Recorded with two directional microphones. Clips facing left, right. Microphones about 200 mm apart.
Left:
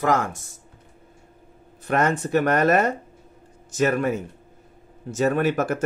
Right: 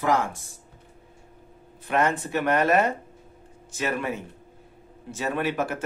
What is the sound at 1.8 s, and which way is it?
Speech, 40° left (ahead or behind).